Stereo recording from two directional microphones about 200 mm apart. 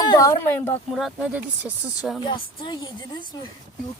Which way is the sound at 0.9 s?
Centre (ahead or behind).